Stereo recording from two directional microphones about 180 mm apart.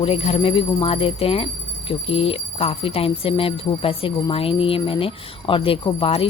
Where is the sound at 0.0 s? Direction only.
35° left (ahead or behind).